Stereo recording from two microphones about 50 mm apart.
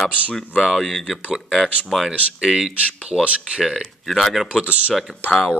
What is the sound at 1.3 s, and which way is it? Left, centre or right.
Speech, centre.